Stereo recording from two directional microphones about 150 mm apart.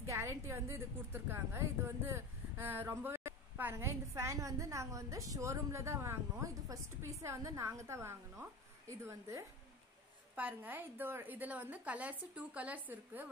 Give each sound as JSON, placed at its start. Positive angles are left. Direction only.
{"t": 0.1, "sound": "a woman's voice", "side_deg": -20}